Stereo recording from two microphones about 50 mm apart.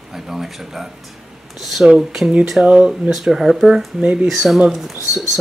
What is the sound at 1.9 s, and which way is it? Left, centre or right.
Speech, centre.